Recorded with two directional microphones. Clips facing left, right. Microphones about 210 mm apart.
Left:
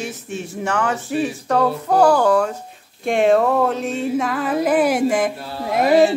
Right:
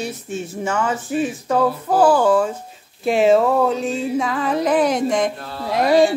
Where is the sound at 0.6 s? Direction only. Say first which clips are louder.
Left 1 dB; centre (ahead or behind).